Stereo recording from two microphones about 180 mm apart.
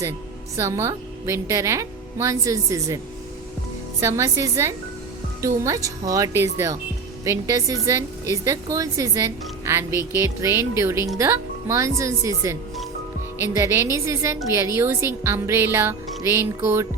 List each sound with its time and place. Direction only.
0.5 s a woman's voice: 15° right (ahead or behind)
4.0 s a woman's voice: 15° right (ahead or behind)